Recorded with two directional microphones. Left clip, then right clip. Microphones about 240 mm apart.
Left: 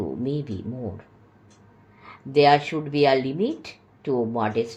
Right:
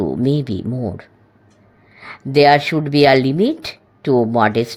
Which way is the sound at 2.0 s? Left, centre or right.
Right.